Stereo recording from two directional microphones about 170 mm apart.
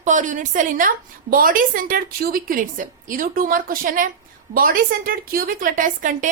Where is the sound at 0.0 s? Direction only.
45° right (ahead or behind).